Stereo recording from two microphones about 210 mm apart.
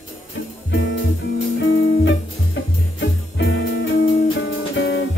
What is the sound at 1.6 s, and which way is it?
Guitar, 70° left (ahead or behind).